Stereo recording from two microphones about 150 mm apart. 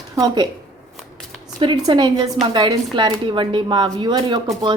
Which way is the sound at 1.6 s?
30° right (ahead or behind).